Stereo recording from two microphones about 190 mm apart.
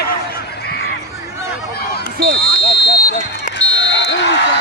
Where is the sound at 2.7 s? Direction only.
65° left (ahead or behind).